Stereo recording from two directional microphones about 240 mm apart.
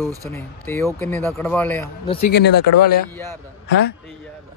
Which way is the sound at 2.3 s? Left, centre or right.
Left.